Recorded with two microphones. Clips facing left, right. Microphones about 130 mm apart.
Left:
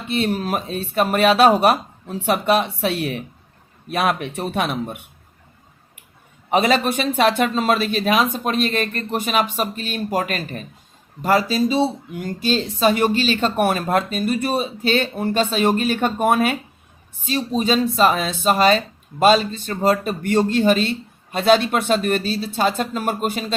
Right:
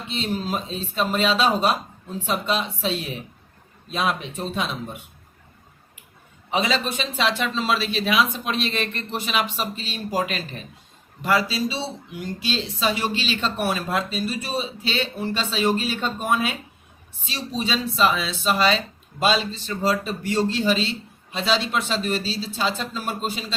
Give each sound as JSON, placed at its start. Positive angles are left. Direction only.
{"t": 0.1, "sound": "speech", "side_deg": 60}
{"t": 6.5, "sound": "speech", "side_deg": 55}
{"t": 17.2, "sound": "speech", "side_deg": 45}